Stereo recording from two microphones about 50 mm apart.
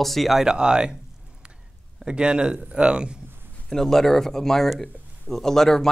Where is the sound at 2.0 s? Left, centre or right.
Centre.